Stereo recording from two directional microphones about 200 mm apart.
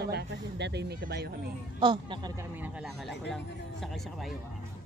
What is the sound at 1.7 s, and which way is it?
Speech, 25° right (ahead or behind).